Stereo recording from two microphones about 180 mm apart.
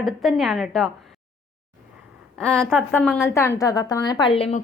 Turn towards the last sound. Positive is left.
turn(degrees=30)  # may be behind; listen again after turning